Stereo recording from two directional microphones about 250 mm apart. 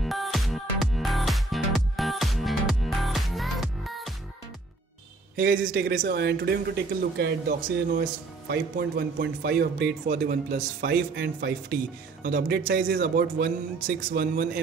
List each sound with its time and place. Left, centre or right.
0.0 s music: centre
5.3 s speech: right